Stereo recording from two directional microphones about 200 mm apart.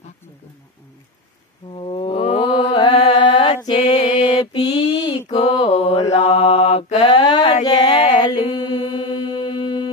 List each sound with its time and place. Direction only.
1.7 s mantra: 25° left (ahead or behind)
3.9 s mantra: 35° left (ahead or behind)
7.0 s a sound: 20° left (ahead or behind)
7.6 s mantra: 25° left (ahead or behind)